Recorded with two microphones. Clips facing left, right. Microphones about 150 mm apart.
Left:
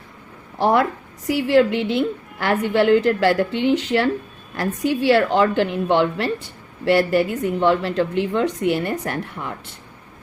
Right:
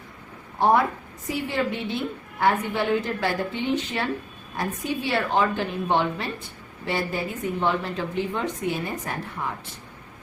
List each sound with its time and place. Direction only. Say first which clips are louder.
0.6 s a woman's voice: left 2 dB; 85° left